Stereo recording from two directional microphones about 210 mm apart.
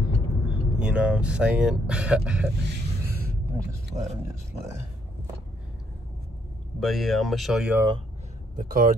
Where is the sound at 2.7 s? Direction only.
45° right (ahead or behind).